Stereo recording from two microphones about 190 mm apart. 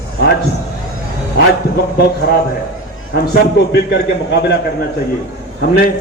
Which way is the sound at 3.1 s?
55° left (ahead or behind).